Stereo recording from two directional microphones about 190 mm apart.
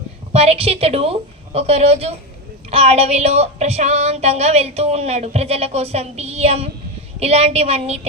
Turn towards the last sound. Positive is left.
turn(degrees=-35)  # may be behind; listen again after turning